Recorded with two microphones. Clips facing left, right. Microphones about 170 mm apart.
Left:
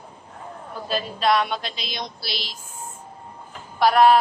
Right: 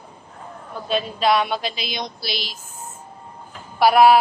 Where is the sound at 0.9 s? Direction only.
Centre (ahead or behind).